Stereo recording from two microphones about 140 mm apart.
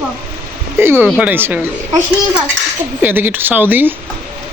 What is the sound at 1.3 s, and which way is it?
Speech, 15° right (ahead or behind).